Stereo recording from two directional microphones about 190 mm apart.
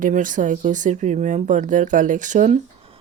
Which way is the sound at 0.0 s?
45° right (ahead or behind).